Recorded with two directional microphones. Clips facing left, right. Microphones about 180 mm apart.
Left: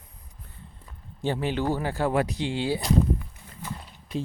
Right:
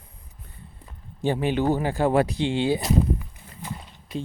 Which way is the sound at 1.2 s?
15° right (ahead or behind).